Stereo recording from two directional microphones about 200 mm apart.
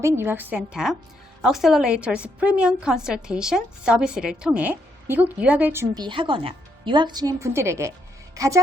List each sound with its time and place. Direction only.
0.0 s a woman's voice: 10° right (ahead or behind)